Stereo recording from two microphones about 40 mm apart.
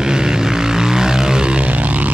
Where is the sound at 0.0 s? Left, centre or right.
Centre.